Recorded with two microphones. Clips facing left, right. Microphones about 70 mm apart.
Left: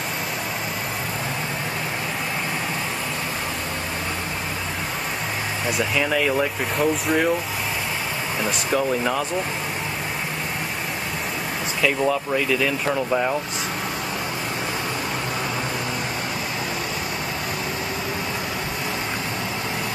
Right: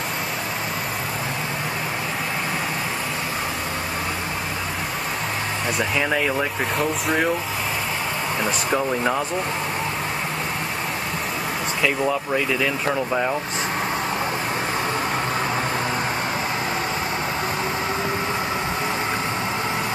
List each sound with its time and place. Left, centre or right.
5.9 s speech: centre
8.7 s speech: centre
11.8 s speech: centre